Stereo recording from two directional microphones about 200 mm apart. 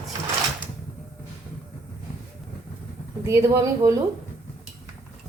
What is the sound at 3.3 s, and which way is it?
Speech, 15° right (ahead or behind).